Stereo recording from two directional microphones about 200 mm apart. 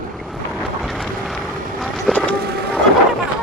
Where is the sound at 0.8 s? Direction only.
Centre (ahead or behind).